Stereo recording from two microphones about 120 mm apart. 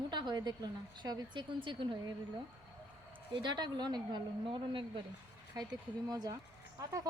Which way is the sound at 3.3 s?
40° right (ahead or behind).